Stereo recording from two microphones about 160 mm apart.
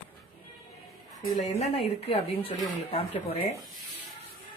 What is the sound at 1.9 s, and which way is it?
Speech, 35° left (ahead or behind).